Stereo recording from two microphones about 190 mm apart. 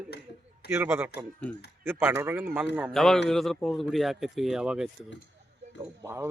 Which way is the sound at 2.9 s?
Centre (ahead or behind).